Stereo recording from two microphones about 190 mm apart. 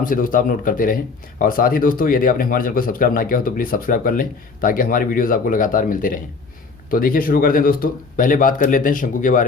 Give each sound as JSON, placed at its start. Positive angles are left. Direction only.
{"t": 0.0, "sound": "speech", "side_deg": 45}